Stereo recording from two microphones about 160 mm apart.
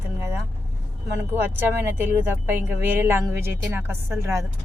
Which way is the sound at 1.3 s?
15° right (ahead or behind).